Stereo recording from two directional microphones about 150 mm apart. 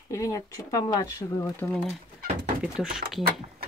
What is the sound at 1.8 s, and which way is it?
Speech, 50° right (ahead or behind).